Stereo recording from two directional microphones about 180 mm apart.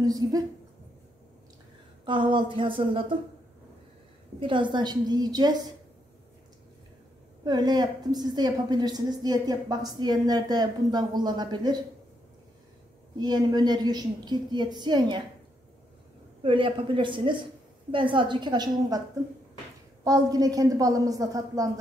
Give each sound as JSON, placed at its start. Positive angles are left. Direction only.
{"t": 0.0, "sound": "a woman's voice", "side_deg": -20}
{"t": 2.0, "sound": "a woman's voice", "side_deg": -25}
{"t": 4.4, "sound": "a woman's voice", "side_deg": -25}
{"t": 7.4, "sound": "a woman's voice", "side_deg": -25}
{"t": 13.2, "sound": "a woman's voice", "side_deg": -25}
{"t": 16.4, "sound": "a woman's voice", "side_deg": -30}
{"t": 20.0, "sound": "a woman's voice", "side_deg": -20}